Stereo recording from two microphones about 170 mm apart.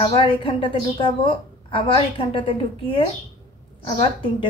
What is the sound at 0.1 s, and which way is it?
A woman's voice, 30° left (ahead or behind).